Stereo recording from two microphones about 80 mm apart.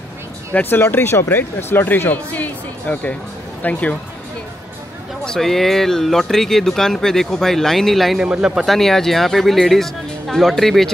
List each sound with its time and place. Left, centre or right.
0.5 s speech: left
5.2 s speech: centre
8.3 s speech: centre
8.6 s speech: centre